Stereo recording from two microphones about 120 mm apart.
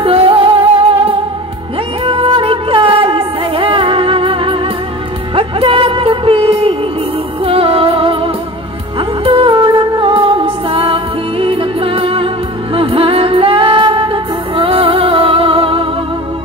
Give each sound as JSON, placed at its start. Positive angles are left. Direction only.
{"t": 0.0, "sound": "music", "side_deg": -50}